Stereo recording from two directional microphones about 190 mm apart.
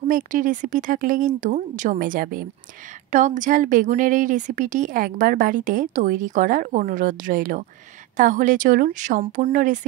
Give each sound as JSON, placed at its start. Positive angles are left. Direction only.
{"t": 0.1, "sound": "a woman's voice", "side_deg": -45}